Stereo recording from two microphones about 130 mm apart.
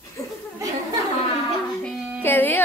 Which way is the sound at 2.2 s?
15° left (ahead or behind).